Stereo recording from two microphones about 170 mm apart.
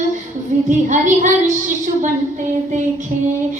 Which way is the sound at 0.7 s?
45° right (ahead or behind).